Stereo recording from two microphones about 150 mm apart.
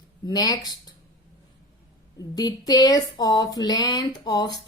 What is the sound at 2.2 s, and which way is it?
Speech, 25° left (ahead or behind).